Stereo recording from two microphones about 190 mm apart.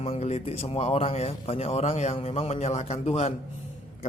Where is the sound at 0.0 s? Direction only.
35° left (ahead or behind).